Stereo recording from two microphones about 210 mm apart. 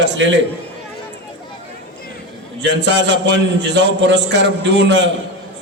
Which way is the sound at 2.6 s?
55° right (ahead or behind).